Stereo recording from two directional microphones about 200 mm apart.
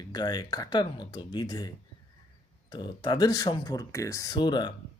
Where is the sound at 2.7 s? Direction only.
20° left (ahead or behind).